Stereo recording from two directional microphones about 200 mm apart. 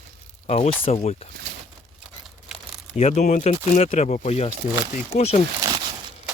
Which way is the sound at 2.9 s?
35° left (ahead or behind).